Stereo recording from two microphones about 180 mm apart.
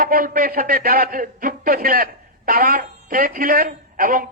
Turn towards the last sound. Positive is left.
turn(degrees=-50)  # may be behind; listen again after turning